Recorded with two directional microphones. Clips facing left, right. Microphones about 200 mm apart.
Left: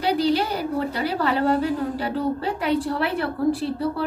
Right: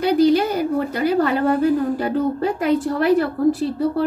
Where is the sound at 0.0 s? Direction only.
50° right (ahead or behind).